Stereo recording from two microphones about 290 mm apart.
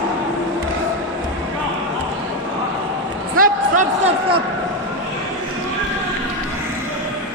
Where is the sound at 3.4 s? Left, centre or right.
Right.